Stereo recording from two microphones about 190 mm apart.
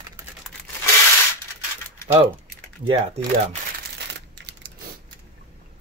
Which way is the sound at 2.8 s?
30° right (ahead or behind).